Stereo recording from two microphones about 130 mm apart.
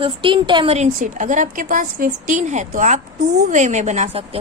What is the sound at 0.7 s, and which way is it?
A woman's voice, 65° right (ahead or behind).